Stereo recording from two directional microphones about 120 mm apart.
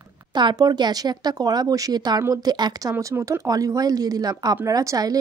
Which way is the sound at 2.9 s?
25° right (ahead or behind).